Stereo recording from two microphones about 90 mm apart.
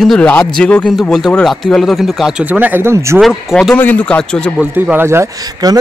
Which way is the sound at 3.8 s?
15° left (ahead or behind).